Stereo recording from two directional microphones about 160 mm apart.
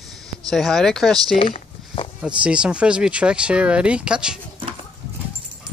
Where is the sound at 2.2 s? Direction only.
5° right (ahead or behind).